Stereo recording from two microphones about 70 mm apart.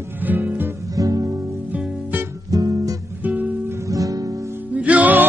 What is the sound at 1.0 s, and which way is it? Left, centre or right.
Music, right.